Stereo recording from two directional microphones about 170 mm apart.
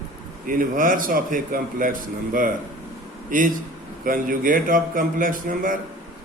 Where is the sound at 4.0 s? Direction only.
55° right (ahead or behind).